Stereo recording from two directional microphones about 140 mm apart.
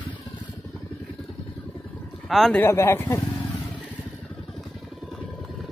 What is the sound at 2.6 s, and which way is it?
Speech, 20° left (ahead or behind).